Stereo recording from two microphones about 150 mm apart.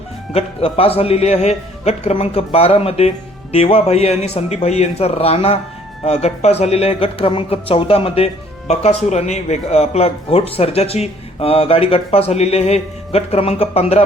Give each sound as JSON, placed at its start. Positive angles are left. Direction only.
{"t": 0.3, "sound": "speech", "side_deg": 40}